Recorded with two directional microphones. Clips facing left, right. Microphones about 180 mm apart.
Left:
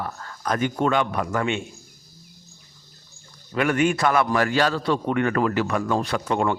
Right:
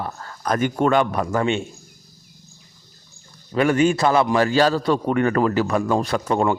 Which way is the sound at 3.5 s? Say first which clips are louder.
Right 4 dB; 30° right (ahead or behind).